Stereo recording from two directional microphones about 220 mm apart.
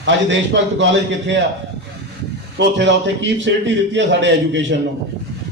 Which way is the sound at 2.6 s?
55° right (ahead or behind).